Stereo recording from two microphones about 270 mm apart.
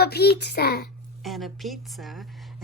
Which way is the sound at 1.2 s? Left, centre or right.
Centre.